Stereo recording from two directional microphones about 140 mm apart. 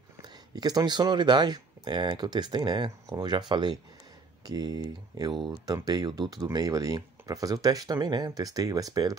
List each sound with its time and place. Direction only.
0.2 s speech: 30° right (ahead or behind)